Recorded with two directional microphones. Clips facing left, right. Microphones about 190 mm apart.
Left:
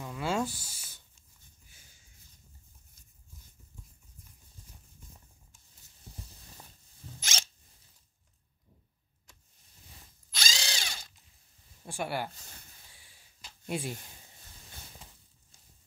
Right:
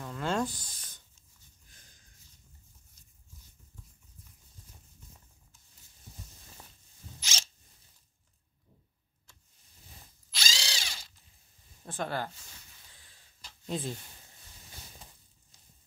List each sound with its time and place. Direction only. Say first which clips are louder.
0.0 s a sound: even; 10° left (ahead or behind)
7.2 s zipper: left 3 dB; 55° left (ahead or behind)
10.3 s ratchet: left 1 dB; 50° left (ahead or behind)
11.8 s speech: even; 10° left (ahead or behind)
12.4 s speech: left 2 dB; 45° left (ahead or behind)
12.9 s a sound: even; 10° left (ahead or behind)